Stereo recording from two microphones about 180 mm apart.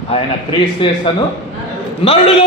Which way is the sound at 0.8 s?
30° left (ahead or behind).